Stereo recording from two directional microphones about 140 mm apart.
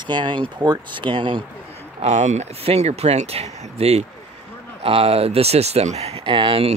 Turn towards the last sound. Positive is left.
turn(degrees=-40)  # may be behind; listen again after turning